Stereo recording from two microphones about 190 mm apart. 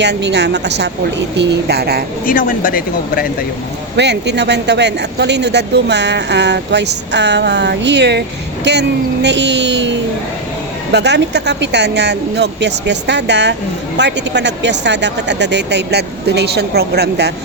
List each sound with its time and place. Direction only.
0.0 s speech: 65° right (ahead or behind)
2.2 s speech: 45° left (ahead or behind)
3.9 s speech: 65° right (ahead or behind)
10.9 s speech: 65° right (ahead or behind)